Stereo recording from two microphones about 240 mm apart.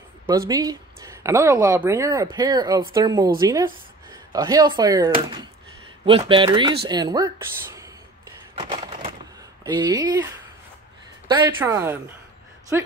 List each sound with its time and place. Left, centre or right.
0.3 s speech: centre
8.5 s a sound: centre
9.6 s speech: centre
11.2 s speech: centre